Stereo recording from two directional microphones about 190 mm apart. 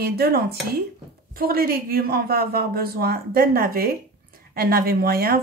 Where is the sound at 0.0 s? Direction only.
55° right (ahead or behind).